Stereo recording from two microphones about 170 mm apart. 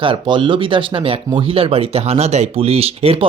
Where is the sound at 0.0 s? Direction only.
30° right (ahead or behind).